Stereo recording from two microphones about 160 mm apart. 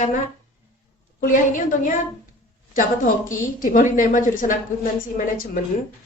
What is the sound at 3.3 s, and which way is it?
A woman's voice, 55° left (ahead or behind).